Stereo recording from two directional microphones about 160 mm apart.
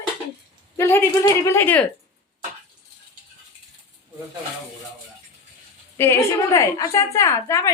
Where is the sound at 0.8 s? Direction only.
15° left (ahead or behind).